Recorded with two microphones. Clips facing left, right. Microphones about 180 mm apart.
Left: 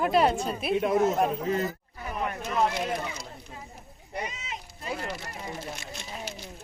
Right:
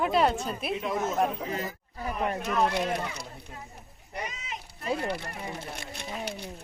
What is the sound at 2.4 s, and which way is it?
Speech, 65° right (ahead or behind).